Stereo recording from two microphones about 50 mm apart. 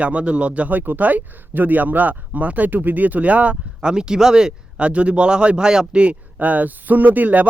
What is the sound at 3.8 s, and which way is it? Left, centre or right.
Speech, centre.